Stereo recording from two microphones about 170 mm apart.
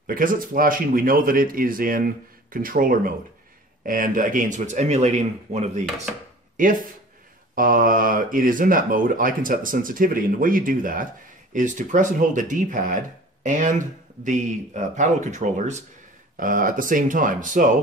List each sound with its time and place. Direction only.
0.0 s speech: 55° right (ahead or behind)
6.5 s speech: 50° right (ahead or behind)